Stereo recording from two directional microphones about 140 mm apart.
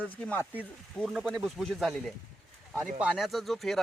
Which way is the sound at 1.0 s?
Centre (ahead or behind).